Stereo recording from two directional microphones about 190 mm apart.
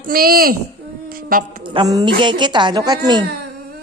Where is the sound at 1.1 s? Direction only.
50° right (ahead or behind).